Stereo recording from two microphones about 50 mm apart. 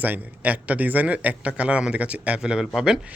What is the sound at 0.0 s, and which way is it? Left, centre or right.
Speech, right.